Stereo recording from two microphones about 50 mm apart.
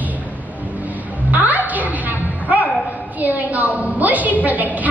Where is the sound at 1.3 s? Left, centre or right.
Right.